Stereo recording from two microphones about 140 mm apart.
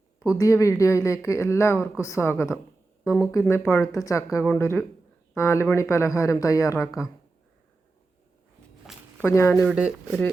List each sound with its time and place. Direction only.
0.3 s speech: 20° left (ahead or behind)
8.9 s a sound: centre (ahead or behind)
9.2 s speech: 15° left (ahead or behind)
9.6 s speech: 5° right (ahead or behind)